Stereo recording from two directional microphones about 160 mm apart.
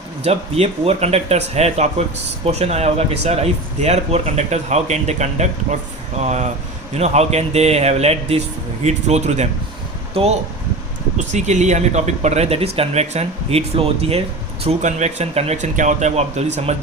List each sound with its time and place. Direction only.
0.2 s speech: 40° right (ahead or behind)